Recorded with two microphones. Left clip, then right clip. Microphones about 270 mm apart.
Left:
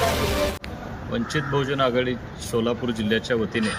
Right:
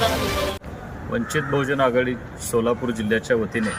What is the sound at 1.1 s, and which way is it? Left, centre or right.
Speech, centre.